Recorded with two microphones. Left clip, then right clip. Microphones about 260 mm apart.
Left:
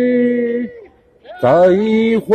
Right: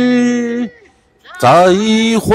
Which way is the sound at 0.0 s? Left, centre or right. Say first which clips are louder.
Even; centre.